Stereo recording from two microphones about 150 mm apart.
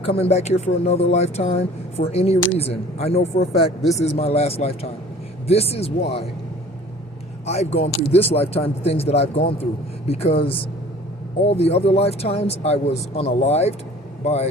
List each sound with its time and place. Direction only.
0.0 s speech: 40° left (ahead or behind)
7.4 s speech: 45° left (ahead or behind)